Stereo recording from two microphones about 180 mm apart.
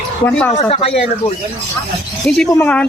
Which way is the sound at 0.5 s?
35° left (ahead or behind).